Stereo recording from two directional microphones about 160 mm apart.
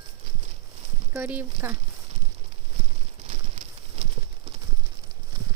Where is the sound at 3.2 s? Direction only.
45° right (ahead or behind).